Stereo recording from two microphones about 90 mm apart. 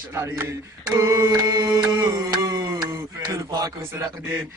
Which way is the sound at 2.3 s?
45° right (ahead or behind).